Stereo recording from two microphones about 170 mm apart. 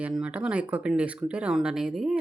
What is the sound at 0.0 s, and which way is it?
Speech, 5° right (ahead or behind).